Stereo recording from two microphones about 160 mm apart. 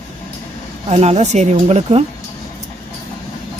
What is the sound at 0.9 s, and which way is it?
Speech, 40° right (ahead or behind).